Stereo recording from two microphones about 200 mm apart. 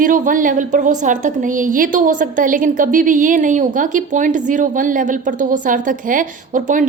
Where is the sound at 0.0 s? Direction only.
40° right (ahead or behind).